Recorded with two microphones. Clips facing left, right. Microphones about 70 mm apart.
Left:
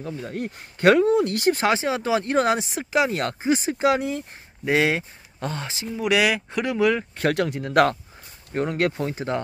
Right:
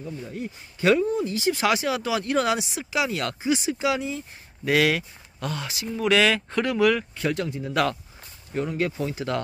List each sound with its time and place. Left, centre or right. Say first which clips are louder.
0.0 s speech: left 3 dB; left
1.0 s speech: left 5 dB; left
1.6 s speech: left 1 dB; left
4.6 s speech: even; left
5.9 s speech: even; centre
7.2 s speech: left 4 dB; left
8.5 s speech: left 3 dB; left
9.0 s speech: left 1 dB; left